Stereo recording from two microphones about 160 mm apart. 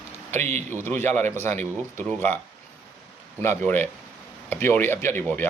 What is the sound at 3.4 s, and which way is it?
Speech, 15° left (ahead or behind).